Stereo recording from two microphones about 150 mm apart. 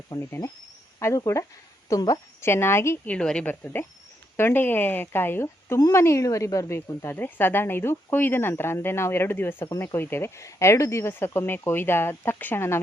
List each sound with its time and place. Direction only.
0.1 s a woman's voice: 25° left (ahead or behind)
3.2 s speech: 5° left (ahead or behind)